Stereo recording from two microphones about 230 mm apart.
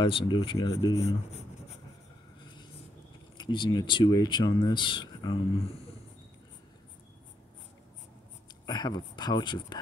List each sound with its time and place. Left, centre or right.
0.0 s speech: left
3.3 s speech: centre
8.6 s speech: centre